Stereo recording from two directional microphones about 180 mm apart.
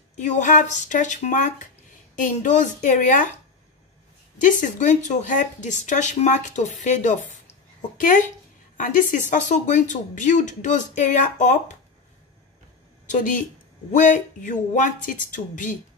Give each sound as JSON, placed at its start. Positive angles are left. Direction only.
{"t": 0.1, "sound": "speech", "side_deg": 45}
{"t": 4.4, "sound": "speech", "side_deg": 45}
{"t": 8.7, "sound": "speech", "side_deg": 45}
{"t": 13.0, "sound": "speech", "side_deg": 45}